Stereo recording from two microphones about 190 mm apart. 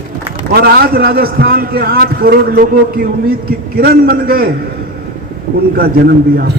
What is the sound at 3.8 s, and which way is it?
Speech, 55° right (ahead or behind).